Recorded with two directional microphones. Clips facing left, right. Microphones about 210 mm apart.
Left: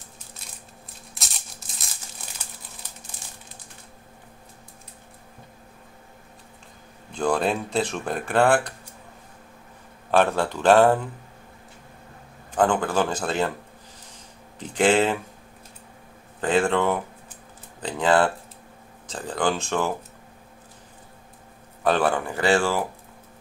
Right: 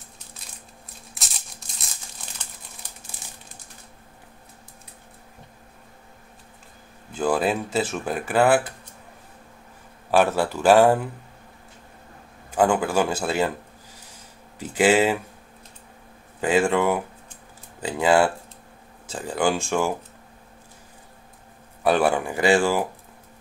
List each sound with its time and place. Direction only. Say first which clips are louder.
7.1 s speech: right 1 dB; 5° right (ahead or behind)
10.1 s a man's voice: right 1 dB; 10° right (ahead or behind)
12.4 s a man's voice: right 1 dB; 10° right (ahead or behind)
14.6 s a man's voice: right 1 dB; 5° right (ahead or behind)
16.3 s a man's voice: right 1 dB; 10° right (ahead or behind)
21.8 s a man's voice: right 2 dB; 10° right (ahead or behind)